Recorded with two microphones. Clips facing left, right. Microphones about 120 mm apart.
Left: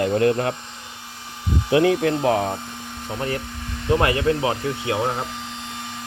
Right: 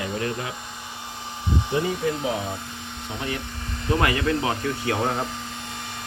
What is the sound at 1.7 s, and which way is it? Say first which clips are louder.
Speech: left 9 dB; 80° left.